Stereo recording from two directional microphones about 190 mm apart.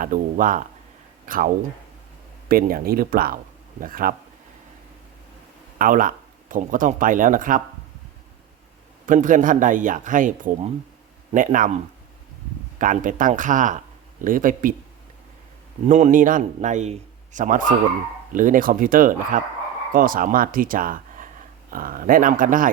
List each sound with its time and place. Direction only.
0.0 s speech: 45° right (ahead or behind)
5.8 s speech: 45° right (ahead or behind)
9.0 s speech: 45° right (ahead or behind)
12.8 s speech: 45° right (ahead or behind)
15.9 s a man's voice: 40° right (ahead or behind)